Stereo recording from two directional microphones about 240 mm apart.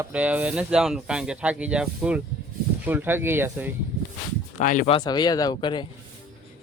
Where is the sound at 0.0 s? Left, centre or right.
Centre.